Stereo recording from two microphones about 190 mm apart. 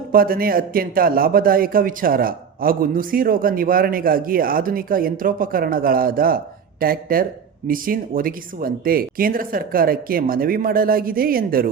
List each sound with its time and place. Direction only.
0.1 s a man's voice: 50° right (ahead or behind)